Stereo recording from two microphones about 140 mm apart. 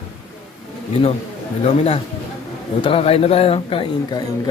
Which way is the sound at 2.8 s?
40° left (ahead or behind).